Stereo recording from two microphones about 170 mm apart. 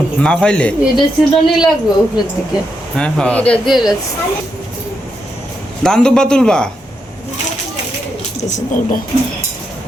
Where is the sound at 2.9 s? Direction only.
5° left (ahead or behind).